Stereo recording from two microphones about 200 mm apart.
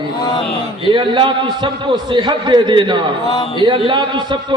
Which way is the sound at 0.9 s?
25° right (ahead or behind).